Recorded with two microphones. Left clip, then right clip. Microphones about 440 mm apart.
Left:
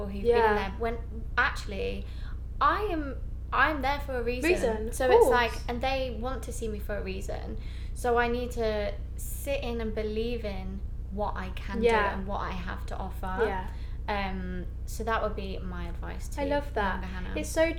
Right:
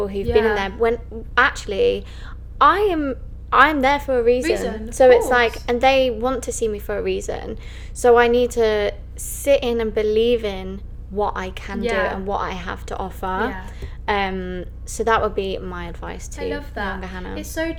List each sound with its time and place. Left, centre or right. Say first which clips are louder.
0.0 s a sound: right 14 dB; right
0.5 s a woman's voice: right 10 dB; right
11.8 s a woman's voice: right 3 dB; left
12.0 s a woman's voice: right 9 dB; right
16.3 s a woman's voice: right 1 dB; left
17.0 s a woman's voice: right 9 dB; right
17.3 s a woman's voice: even; left